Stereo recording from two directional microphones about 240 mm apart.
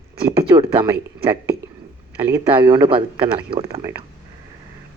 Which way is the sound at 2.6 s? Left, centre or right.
Right.